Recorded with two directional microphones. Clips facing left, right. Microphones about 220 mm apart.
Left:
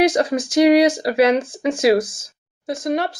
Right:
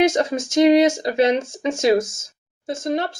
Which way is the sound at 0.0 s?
25° right (ahead or behind).